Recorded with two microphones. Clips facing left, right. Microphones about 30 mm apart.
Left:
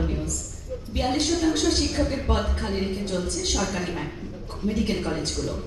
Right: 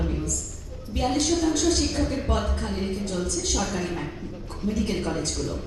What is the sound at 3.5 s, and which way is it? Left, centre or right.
Speech, centre.